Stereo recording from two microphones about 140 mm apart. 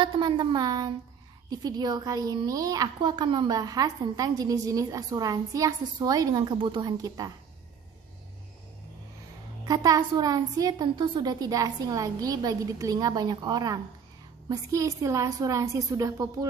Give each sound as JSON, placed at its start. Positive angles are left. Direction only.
{"t": 0.0, "sound": "a woman's voice", "side_deg": -35}
{"t": 9.7, "sound": "a woman's voice", "side_deg": -30}